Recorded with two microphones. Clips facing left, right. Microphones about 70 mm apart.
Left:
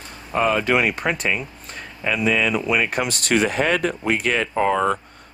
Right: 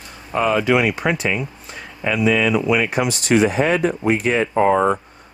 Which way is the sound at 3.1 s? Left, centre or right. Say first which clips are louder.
Right 4 dB; left.